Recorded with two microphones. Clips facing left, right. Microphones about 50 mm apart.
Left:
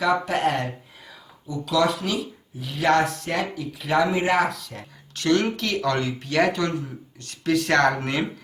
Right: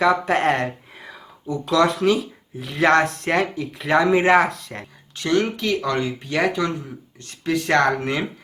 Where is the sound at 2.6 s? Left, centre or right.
Right.